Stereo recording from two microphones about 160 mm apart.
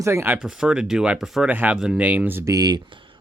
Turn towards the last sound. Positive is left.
turn(degrees=-30)  # may be behind; listen again after turning